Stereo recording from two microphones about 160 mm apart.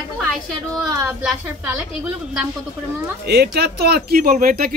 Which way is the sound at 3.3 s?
85° right.